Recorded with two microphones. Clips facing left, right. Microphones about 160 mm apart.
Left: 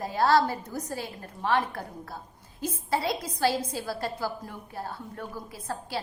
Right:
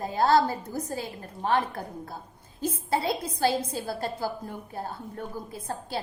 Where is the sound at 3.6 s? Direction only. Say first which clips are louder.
Right 1 dB; 55° right (ahead or behind).